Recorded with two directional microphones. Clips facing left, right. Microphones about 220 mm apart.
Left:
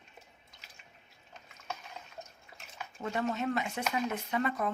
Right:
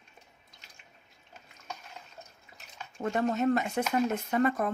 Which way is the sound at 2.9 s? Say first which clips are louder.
Right 5 dB; 45° right (ahead or behind).